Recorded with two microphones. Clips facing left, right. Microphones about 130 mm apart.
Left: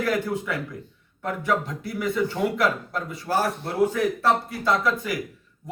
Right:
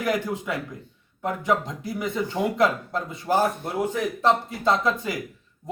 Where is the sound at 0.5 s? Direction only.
20° right (ahead or behind).